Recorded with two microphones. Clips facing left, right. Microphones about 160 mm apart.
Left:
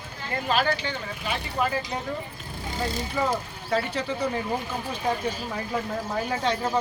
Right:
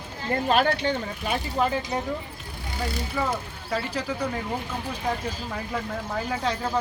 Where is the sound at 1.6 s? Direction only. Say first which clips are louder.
Right 2 dB; 25° right (ahead or behind).